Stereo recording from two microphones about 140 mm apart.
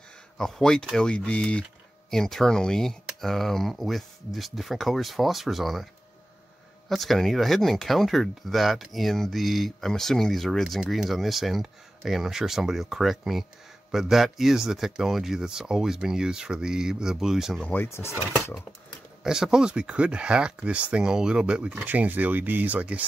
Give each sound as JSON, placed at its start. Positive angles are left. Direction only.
{"t": 0.4, "sound": "speech", "side_deg": 5}
{"t": 6.9, "sound": "speech", "side_deg": 0}
{"t": 17.6, "sound": "speech", "side_deg": 15}
{"t": 19.2, "sound": "speech", "side_deg": -5}